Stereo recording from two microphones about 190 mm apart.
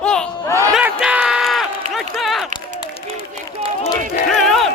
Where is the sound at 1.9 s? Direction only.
Centre (ahead or behind).